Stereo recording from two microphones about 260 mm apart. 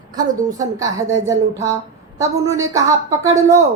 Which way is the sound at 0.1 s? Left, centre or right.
Centre.